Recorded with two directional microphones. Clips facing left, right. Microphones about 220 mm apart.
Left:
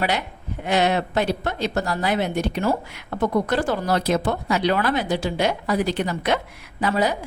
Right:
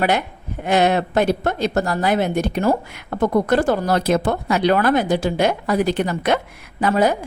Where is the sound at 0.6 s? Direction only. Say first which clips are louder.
Right 4 dB; 50° right (ahead or behind).